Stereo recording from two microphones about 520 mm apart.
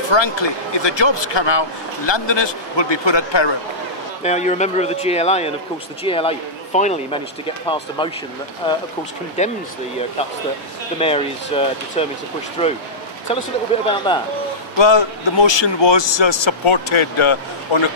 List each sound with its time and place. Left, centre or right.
0.1 s speech: left
4.2 s speech: centre
11.0 s speech: centre
14.8 s a man's voice: left